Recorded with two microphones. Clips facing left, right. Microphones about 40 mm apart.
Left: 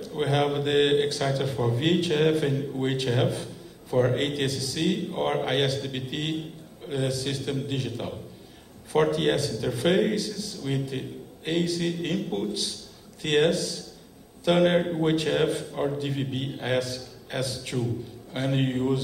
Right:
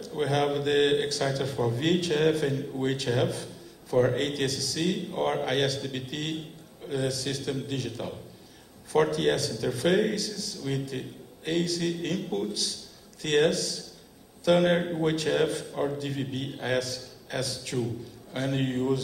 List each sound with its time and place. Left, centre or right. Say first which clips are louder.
0.1 s a man's voice: left 1 dB; left
3.9 s a man's voice: even; centre
4.2 s a man's voice: left 1 dB; left
9.1 s a man's voice: left 1 dB; left
9.5 s a man's voice: left 1 dB; left
13.2 s a man's voice: left 1 dB; left
14.8 s a man's voice: left 3 dB; centre
15.0 s a man's voice: left 2 dB; left
15.7 s a man's voice: left 2 dB; centre